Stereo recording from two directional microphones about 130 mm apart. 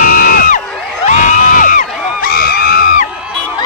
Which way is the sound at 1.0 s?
75° left (ahead or behind).